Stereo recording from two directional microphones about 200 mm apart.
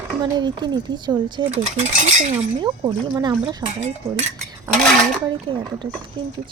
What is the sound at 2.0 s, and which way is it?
Cutlery, 35° right (ahead or behind).